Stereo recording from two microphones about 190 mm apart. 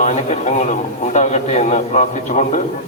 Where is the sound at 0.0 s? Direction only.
40° left (ahead or behind).